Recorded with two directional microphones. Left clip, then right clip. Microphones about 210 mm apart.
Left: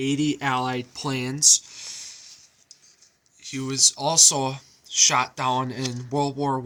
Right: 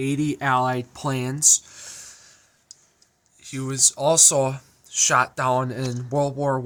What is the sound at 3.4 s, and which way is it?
Speech, 50° right (ahead or behind).